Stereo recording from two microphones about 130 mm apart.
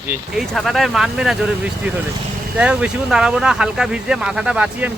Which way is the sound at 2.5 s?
10° right (ahead or behind).